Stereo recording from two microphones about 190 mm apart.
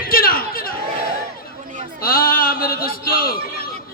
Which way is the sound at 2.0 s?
50° left (ahead or behind).